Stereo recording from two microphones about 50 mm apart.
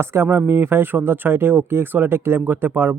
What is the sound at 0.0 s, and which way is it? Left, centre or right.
Speech, right.